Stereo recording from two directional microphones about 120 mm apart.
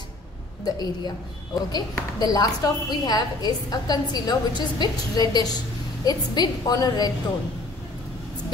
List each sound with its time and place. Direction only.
0.7 s a woman's voice: 35° left (ahead or behind)